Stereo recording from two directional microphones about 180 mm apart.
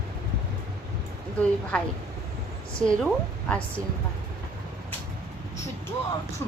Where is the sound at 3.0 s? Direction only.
5° left (ahead or behind).